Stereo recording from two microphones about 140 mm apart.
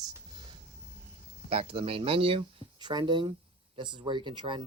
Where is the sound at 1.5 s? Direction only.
40° right (ahead or behind).